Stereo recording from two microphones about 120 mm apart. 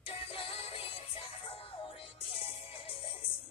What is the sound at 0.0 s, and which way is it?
Music, 50° left (ahead or behind).